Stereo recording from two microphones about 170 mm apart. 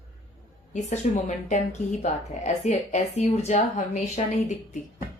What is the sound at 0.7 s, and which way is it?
Speech, 45° left (ahead or behind).